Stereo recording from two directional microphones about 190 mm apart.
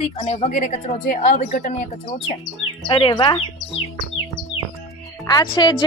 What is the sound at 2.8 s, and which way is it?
Speech, 25° left (ahead or behind).